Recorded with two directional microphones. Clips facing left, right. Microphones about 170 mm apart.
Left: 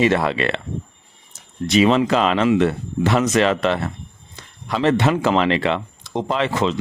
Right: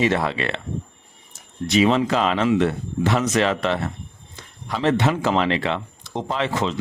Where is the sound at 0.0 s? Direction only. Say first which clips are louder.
Left 3 dB; 70° left (ahead or behind).